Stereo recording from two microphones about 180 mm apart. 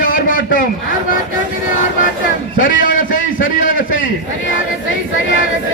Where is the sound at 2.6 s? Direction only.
50° left (ahead or behind).